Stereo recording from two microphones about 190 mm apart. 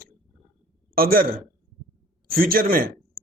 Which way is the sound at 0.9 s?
50° right (ahead or behind).